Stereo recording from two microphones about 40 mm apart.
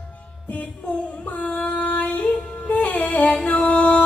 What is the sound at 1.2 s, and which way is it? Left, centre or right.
Yodeling, left.